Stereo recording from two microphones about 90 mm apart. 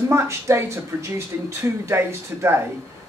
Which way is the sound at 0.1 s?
30° right (ahead or behind).